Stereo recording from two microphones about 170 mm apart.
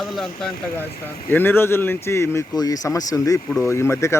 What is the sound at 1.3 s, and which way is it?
Speech, 10° left (ahead or behind).